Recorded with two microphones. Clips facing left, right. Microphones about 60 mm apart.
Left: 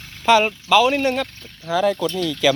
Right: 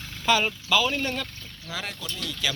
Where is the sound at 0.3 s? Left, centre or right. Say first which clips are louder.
Left 8 dB; left.